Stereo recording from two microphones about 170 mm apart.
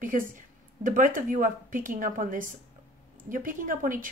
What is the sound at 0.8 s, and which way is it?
Speech, 50° right (ahead or behind).